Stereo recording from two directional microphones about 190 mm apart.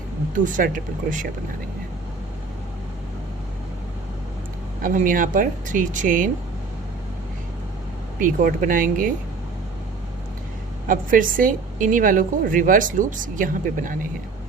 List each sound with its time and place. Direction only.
0.3 s a woman's voice: 45° right (ahead or behind)
4.8 s a woman's voice: 45° right (ahead or behind)
8.2 s a woman's voice: 45° right (ahead or behind)
10.8 s a woman's voice: 45° right (ahead or behind)